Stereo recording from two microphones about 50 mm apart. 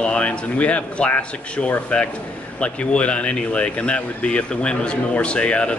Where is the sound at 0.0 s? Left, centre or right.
Left.